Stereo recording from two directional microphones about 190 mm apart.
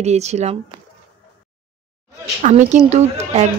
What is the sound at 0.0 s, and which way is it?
Speech, 35° right (ahead or behind).